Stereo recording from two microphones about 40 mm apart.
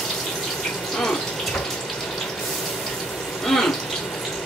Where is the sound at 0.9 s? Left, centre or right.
Centre.